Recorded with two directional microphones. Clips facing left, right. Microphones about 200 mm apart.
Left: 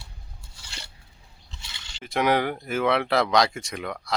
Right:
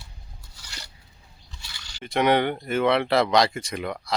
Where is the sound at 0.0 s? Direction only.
25° left (ahead or behind).